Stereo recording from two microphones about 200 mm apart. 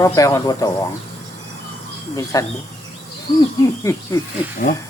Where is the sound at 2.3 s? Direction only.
15° left (ahead or behind).